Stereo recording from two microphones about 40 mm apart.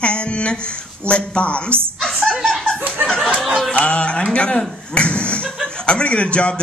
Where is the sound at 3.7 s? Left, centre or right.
Left.